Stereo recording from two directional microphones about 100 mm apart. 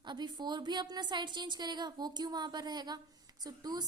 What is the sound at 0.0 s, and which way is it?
A woman's voice, 50° right (ahead or behind).